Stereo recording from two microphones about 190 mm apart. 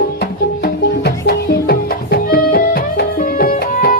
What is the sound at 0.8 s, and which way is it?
Music, 55° left (ahead or behind).